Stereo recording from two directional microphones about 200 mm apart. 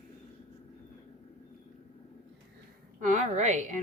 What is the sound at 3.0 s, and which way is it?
Speech, 40° right (ahead or behind).